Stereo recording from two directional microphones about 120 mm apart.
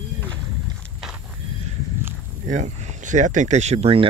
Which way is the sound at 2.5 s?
80° right.